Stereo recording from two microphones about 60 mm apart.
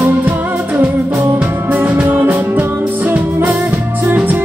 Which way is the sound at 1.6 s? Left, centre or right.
Right.